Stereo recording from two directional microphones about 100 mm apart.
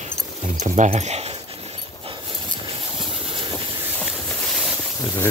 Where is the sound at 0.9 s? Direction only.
90° right.